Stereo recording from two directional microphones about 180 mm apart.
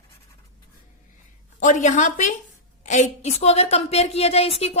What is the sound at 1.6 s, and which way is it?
A woman's voice, 45° left (ahead or behind).